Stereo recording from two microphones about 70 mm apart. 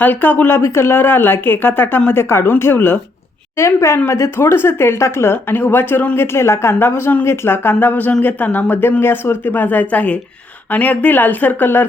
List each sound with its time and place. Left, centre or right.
0.0 s speech: left
0.6 s speech: left
2.3 s speech: left
3.6 s a woman's voice: left